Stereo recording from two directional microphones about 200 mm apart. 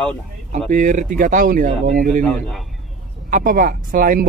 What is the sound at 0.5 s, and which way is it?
Speech, 40° right (ahead or behind).